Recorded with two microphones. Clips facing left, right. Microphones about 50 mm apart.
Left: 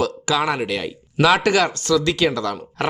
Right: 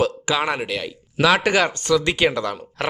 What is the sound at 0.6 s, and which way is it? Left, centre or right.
Speech, centre.